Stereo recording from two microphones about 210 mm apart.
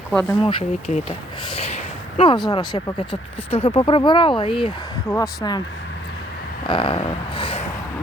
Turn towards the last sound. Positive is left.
turn(degrees=25)  # may be behind; listen again after turning